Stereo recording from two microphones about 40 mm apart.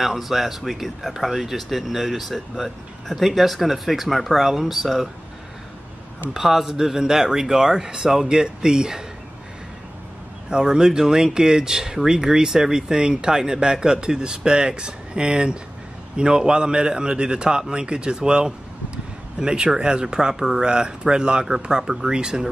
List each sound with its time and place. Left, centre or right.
0.0 s speech: centre
6.3 s speech: centre
10.5 s speech: centre